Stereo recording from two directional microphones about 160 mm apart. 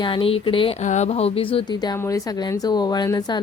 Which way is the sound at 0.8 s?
50° left (ahead or behind).